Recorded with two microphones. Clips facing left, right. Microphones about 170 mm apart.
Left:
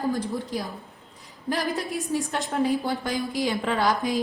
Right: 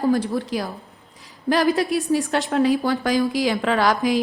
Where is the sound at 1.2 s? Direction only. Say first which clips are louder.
Right 8 dB; 80° right.